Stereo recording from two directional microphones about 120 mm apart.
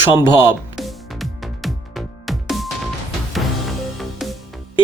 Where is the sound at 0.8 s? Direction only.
Centre (ahead or behind).